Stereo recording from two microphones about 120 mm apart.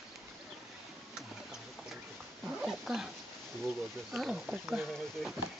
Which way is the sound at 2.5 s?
5° right (ahead or behind).